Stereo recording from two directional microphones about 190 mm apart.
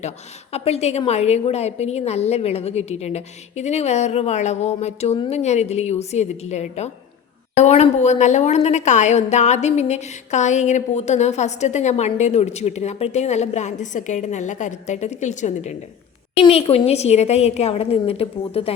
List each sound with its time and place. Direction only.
0.5 s a woman's voice: 35° left (ahead or behind)